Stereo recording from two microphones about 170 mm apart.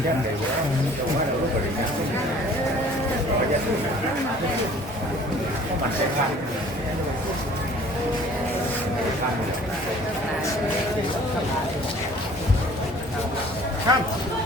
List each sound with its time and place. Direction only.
13.9 s speech: 25° right (ahead or behind)